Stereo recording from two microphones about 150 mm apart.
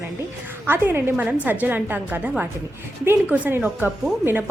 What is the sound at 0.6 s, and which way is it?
A woman's voice, 15° right (ahead or behind).